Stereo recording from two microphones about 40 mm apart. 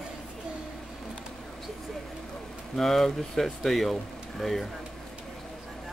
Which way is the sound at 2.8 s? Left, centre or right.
Centre.